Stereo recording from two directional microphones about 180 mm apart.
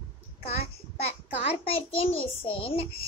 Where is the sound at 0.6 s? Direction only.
35° left (ahead or behind).